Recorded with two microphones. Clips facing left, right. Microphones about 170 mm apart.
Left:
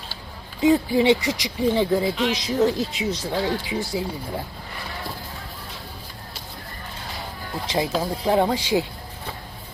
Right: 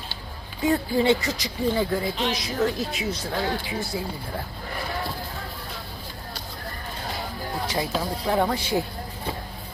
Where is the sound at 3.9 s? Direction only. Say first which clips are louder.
Left 4 dB; 20° left (ahead or behind).